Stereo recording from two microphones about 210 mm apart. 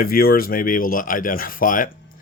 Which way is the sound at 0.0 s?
45° left (ahead or behind).